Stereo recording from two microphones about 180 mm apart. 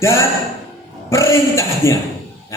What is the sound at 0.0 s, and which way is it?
Speech, 15° left (ahead or behind).